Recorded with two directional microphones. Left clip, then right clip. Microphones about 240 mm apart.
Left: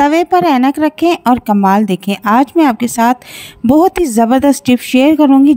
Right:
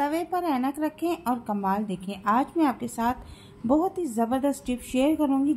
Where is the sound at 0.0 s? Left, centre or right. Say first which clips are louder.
Left 17 dB; left.